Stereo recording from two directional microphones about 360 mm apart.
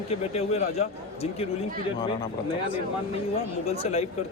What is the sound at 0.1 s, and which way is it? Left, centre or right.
Speech, centre.